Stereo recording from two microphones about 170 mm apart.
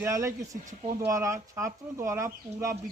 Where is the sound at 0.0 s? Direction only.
15° right (ahead or behind).